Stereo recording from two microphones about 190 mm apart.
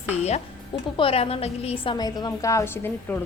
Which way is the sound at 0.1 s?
35° left (ahead or behind).